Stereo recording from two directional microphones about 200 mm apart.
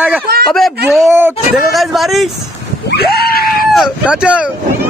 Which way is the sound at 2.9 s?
50° left (ahead or behind).